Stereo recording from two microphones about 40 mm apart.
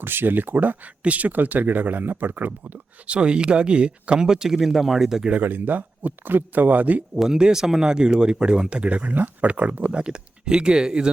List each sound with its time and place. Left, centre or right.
0.0 s speech: right
1.0 s speech: right
3.1 s speech: right
5.4 s speech: right
7.3 s speech: centre; by 9.9 s right
9.9 s speech: right